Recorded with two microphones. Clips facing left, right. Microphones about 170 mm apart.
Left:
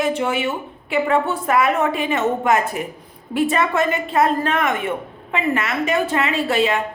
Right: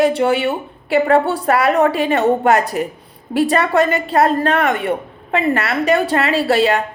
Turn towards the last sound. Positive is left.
turn(degrees=-35)  # may be behind; listen again after turning